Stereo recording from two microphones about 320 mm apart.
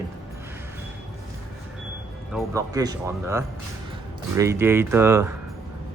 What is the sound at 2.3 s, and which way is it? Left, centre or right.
Speech, centre.